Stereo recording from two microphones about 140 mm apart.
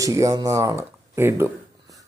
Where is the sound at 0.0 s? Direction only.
25° right (ahead or behind).